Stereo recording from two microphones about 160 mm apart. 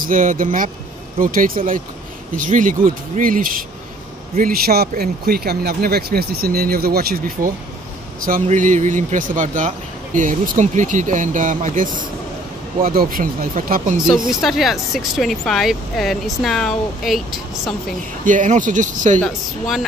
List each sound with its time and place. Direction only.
0.0 s speech: 55° right (ahead or behind)
4.4 s speech: 70° right (ahead or behind)
8.5 s speech: 50° right (ahead or behind)
14.0 s speech: 5° right (ahead or behind)
18.2 s speech: 55° right (ahead or behind)
19.1 s speech: centre (ahead or behind)